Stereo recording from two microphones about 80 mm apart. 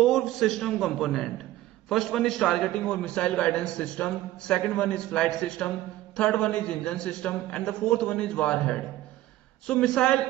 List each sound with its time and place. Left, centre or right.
0.0 s a man's voice: centre